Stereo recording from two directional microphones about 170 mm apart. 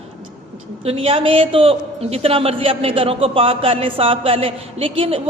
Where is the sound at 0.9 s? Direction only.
35° right (ahead or behind).